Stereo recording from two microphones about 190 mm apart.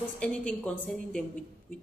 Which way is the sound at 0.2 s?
5° left (ahead or behind).